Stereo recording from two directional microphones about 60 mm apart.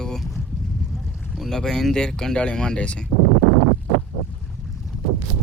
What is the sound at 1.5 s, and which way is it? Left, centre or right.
Speech, centre.